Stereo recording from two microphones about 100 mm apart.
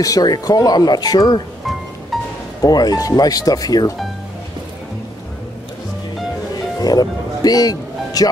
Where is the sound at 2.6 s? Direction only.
40° left (ahead or behind).